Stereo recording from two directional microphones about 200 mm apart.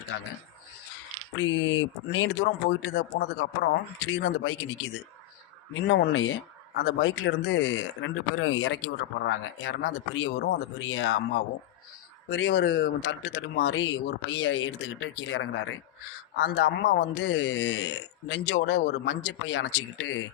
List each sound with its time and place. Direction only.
1.4 s speech: 75° left (ahead or behind)
2.1 s speech: 60° left (ahead or behind)
5.8 s speech: 60° left (ahead or behind)
16.4 s speech: 60° left (ahead or behind)